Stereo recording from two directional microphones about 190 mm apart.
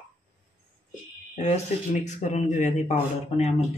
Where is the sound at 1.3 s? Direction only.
35° left (ahead or behind).